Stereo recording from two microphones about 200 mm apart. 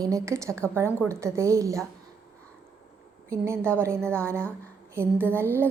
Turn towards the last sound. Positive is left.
turn(degrees=-10)  # may be behind; listen again after turning